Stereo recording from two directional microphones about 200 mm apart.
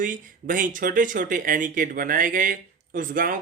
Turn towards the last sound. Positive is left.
turn(degrees=-45)  # may be behind; listen again after turning